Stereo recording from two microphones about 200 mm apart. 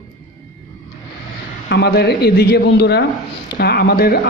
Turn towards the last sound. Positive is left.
turn(degrees=50)  # may be behind; listen again after turning